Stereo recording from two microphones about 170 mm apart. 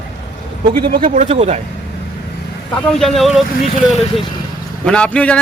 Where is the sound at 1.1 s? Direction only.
40° right (ahead or behind).